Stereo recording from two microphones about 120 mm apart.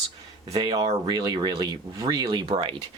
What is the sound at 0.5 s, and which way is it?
Speech, 35° right (ahead or behind).